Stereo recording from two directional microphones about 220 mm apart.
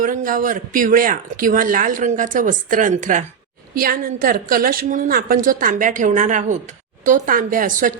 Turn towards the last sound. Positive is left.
turn(degrees=-35)  # may be behind; listen again after turning